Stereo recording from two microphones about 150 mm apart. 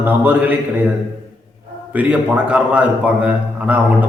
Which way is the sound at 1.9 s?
10° right (ahead or behind).